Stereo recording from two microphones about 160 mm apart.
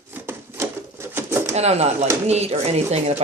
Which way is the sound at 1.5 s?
40° right (ahead or behind).